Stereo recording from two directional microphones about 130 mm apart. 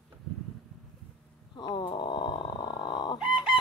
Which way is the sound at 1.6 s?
35° left (ahead or behind).